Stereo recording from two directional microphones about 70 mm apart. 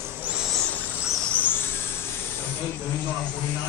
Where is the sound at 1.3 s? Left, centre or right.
Left.